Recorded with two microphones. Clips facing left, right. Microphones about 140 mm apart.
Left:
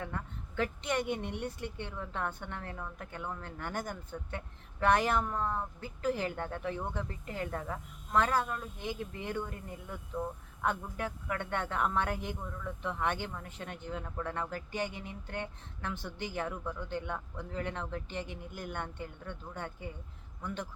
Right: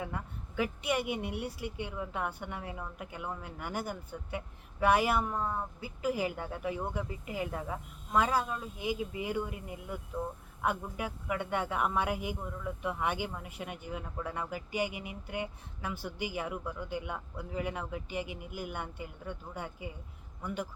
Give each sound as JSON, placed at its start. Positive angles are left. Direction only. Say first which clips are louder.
{"t": 0.0, "sound": "speech", "louder": "right 1 dB", "side_deg": -10}